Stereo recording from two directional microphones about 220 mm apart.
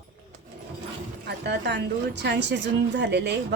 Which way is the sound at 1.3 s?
50° right (ahead or behind).